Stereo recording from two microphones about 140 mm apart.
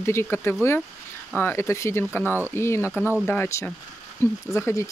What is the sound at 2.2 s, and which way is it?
Speech, 15° right (ahead or behind).